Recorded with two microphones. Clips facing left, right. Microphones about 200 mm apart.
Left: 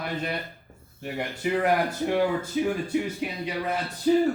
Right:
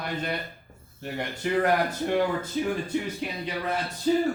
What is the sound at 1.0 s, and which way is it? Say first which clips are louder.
Speech: left 1 dB; 5° left (ahead or behind).